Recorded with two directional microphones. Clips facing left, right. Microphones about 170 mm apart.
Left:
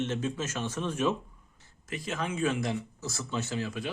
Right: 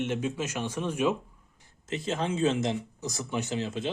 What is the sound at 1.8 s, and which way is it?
Speech, 25° right (ahead or behind).